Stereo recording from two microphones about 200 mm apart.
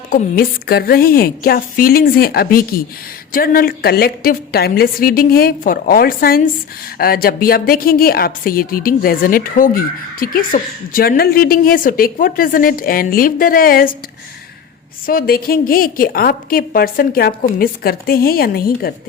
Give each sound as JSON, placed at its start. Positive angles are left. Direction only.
{"t": 0.1, "sound": "a woman's voice", "side_deg": 50}
{"t": 15.0, "sound": "a woman's voice", "side_deg": 45}